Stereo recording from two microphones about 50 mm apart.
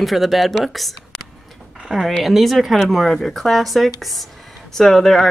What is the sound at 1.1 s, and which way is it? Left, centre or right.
Tick-tock, centre.